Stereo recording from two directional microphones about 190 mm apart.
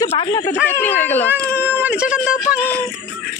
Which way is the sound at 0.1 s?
25° left (ahead or behind).